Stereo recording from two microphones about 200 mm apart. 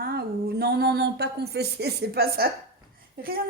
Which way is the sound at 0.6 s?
50° right (ahead or behind).